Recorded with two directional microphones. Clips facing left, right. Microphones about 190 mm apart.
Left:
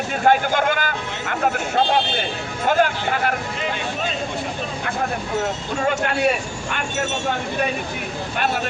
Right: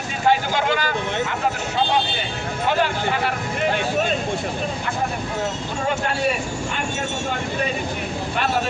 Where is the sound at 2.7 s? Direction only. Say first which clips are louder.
Left 3 dB; 50° left (ahead or behind).